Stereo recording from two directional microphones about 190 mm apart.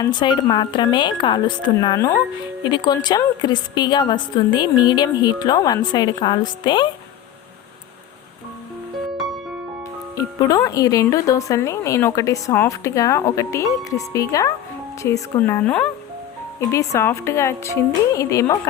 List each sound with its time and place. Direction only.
0.0 s a woman's voice: 25° left (ahead or behind)
10.2 s speech: 20° left (ahead or behind)